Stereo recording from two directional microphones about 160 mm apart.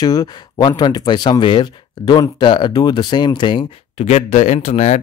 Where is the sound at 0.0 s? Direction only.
25° left (ahead or behind).